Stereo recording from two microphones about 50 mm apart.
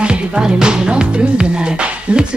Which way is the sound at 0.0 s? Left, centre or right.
Centre.